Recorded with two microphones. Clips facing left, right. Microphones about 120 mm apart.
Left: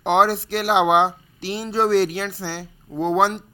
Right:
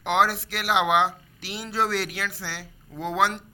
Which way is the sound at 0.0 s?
30° left (ahead or behind).